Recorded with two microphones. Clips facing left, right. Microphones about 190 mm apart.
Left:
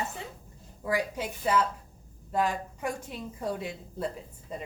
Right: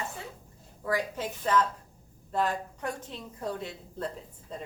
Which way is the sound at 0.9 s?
10° left (ahead or behind).